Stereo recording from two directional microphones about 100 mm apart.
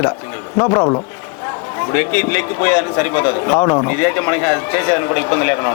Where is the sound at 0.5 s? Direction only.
30° left (ahead or behind).